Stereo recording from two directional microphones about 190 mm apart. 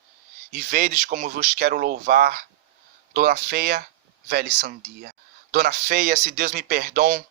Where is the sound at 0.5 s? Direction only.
45° right (ahead or behind).